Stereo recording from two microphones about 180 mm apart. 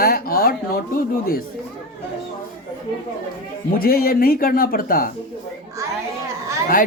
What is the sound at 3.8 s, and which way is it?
A woman's voice, 55° left (ahead or behind).